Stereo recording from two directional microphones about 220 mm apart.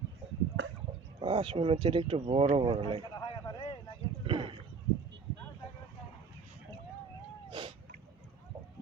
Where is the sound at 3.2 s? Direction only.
15° left (ahead or behind).